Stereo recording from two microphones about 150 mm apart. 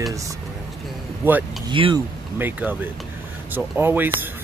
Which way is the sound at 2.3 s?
15° right (ahead or behind).